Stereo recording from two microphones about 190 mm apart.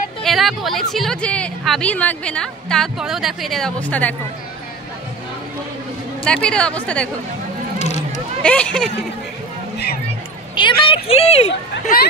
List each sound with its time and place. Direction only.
0.2 s a woman's voice: centre (ahead or behind)
6.2 s a woman's voice: 5° left (ahead or behind)
8.4 s a woman's voice: 5° left (ahead or behind)
10.5 s speech: 25° left (ahead or behind)